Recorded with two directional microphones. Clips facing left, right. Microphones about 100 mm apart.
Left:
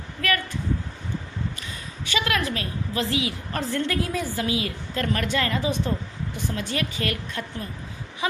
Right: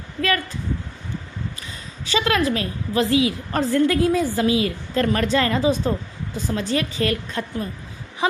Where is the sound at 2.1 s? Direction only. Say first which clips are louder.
Right 6 dB; 30° right (ahead or behind).